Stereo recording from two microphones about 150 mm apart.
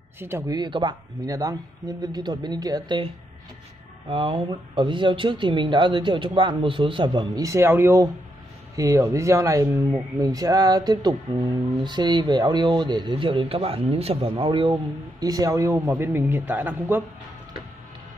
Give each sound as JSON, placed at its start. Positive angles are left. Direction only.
{"t": 0.2, "sound": "speech", "side_deg": -15}
{"t": 0.5, "sound": "speech", "side_deg": -30}
{"t": 4.1, "sound": "speech", "side_deg": -35}